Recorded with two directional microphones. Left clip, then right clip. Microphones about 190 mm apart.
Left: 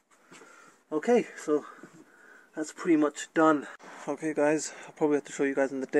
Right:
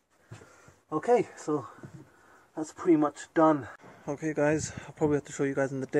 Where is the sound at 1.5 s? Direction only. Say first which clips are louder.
Left 3 dB; 45° left (ahead or behind).